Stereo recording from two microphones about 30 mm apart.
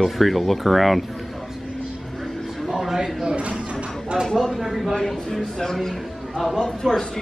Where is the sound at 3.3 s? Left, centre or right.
Right.